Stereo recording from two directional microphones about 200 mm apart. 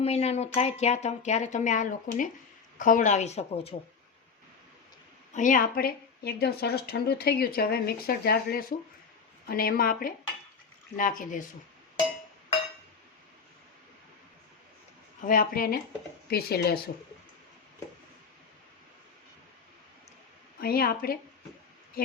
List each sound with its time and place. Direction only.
0.0 s speech: 30° left (ahead or behind)
5.3 s a woman's voice: 40° left (ahead or behind)
15.2 s a woman's voice: 45° left (ahead or behind)
20.6 s a woman's voice: 50° left (ahead or behind)